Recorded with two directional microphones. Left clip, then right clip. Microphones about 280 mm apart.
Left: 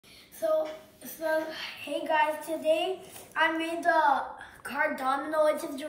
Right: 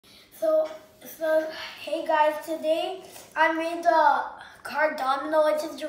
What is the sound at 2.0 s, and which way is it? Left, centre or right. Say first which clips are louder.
A woman's voice: right 4 dB; centre.